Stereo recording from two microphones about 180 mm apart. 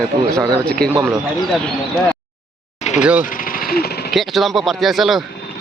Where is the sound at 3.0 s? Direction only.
5° right (ahead or behind).